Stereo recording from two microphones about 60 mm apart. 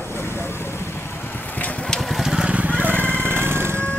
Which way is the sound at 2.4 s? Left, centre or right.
Right.